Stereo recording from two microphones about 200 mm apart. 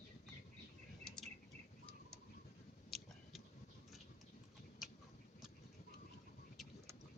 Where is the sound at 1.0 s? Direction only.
Centre (ahead or behind).